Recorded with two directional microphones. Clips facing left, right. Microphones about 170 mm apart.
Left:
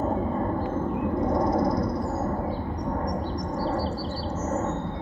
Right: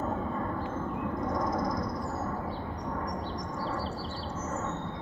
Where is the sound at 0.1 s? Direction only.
35° left (ahead or behind).